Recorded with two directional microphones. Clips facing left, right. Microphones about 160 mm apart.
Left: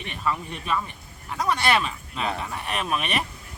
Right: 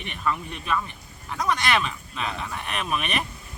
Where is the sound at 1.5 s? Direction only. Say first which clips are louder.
Left 2 dB; 35° left (ahead or behind).